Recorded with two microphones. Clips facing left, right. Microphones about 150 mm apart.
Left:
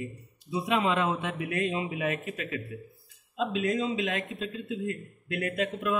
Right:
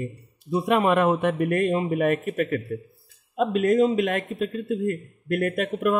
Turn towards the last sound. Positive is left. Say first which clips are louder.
# right 6 dB
turn(degrees=-50)  # may be behind; listen again after turning